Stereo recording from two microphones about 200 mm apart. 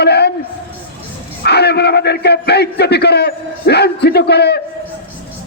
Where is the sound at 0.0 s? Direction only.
55° left (ahead or behind).